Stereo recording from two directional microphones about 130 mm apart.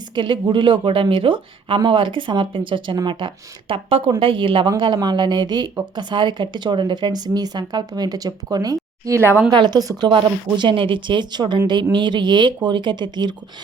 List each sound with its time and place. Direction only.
0.2 s speech: 40° right (ahead or behind)
9.5 s speech: 35° right (ahead or behind)